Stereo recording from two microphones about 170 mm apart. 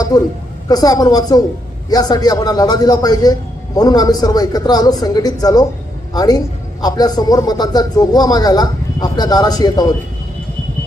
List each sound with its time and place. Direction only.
0.1 s speech: 20° left (ahead or behind)